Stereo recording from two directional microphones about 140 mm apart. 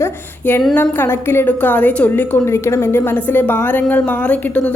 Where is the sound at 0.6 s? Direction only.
10° left (ahead or behind).